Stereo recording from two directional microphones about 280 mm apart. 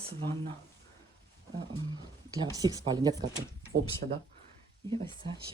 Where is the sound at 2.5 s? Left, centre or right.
Centre.